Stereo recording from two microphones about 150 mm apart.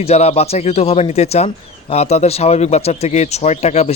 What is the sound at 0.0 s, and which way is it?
A man's voice, 45° left (ahead or behind).